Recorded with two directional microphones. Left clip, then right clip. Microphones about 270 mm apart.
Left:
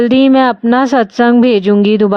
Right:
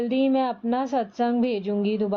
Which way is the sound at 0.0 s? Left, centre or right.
Left.